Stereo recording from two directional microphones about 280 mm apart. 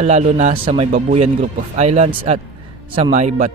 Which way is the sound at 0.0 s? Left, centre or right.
Right.